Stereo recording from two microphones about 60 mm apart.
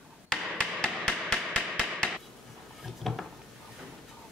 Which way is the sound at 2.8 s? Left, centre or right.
Centre.